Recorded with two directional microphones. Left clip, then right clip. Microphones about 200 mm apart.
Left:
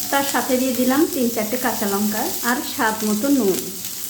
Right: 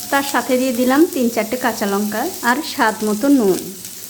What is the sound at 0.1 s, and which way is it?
Speech, 30° right (ahead or behind).